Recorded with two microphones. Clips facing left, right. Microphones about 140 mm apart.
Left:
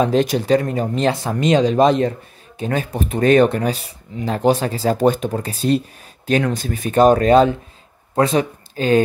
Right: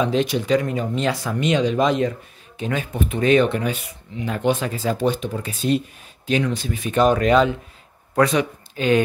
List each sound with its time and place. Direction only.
0.0 s speech: 45° left (ahead or behind)